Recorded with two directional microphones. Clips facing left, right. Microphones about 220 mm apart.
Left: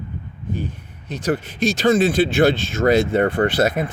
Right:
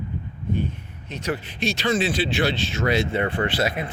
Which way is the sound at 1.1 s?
45° left (ahead or behind).